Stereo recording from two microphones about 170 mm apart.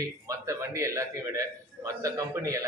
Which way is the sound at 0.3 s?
15° right (ahead or behind).